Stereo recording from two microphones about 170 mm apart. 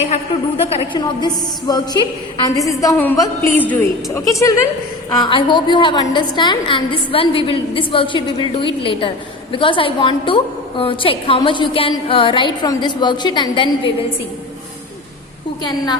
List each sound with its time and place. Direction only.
0.1 s speech: 35° left (ahead or behind)
0.9 s a woman's voice: 25° left (ahead or behind)